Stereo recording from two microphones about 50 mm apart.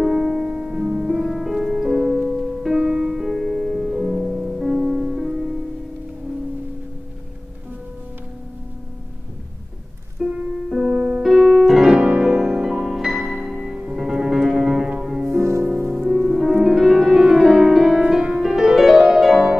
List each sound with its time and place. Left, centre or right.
0.0 s music: centre
0.7 s music: centre
1.0 s music: centre
10.2 s music: centre
11.9 s music: right
15.2 s music: right
16.0 s music: centre